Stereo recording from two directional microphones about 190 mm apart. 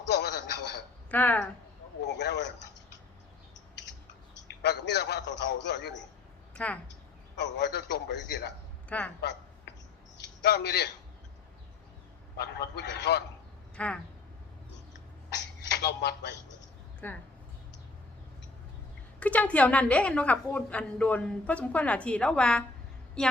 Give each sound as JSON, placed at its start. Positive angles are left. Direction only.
{"t": 0.1, "sound": "a sound", "side_deg": 60}
{"t": 1.1, "sound": "a woman's voice", "side_deg": 10}
{"t": 2.0, "sound": "a man's voice", "side_deg": 65}
{"t": 4.6, "sound": "a man's voice", "side_deg": 60}
{"t": 6.5, "sound": "a sound", "side_deg": 5}
{"t": 7.3, "sound": "a man's voice", "side_deg": 65}
{"t": 8.9, "sound": "a woman's voice", "side_deg": 10}
{"t": 10.2, "sound": "a man's voice", "side_deg": 60}
{"t": 12.4, "sound": "a man's voice", "side_deg": 60}
{"t": 13.7, "sound": "speech", "side_deg": 5}
{"t": 15.6, "sound": "speech", "side_deg": 60}
{"t": 17.0, "sound": "a woman's voice", "side_deg": 10}
{"t": 19.2, "sound": "a woman's voice", "side_deg": 5}